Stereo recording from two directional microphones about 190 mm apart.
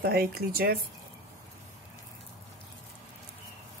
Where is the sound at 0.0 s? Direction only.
55° right (ahead or behind).